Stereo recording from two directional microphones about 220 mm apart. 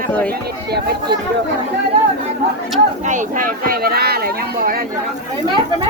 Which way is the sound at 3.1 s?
35° right (ahead or behind).